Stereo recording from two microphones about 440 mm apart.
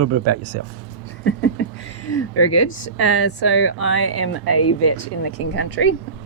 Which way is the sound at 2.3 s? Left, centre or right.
Left.